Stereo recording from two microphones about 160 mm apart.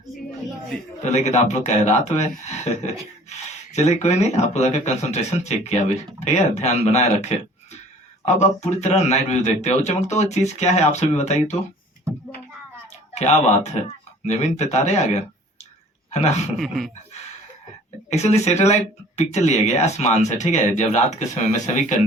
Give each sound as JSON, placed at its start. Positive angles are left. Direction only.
{"t": 1.1, "sound": "a man's voice", "side_deg": 45}
{"t": 13.1, "sound": "a man's voice", "side_deg": 45}
{"t": 16.6, "sound": "a sound", "side_deg": 0}
{"t": 18.1, "sound": "a man's voice", "side_deg": 45}